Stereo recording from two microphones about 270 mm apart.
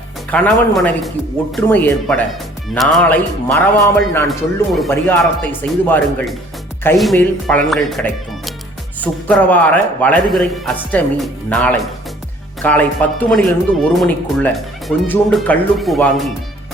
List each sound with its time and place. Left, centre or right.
0.3 s a man's voice: centre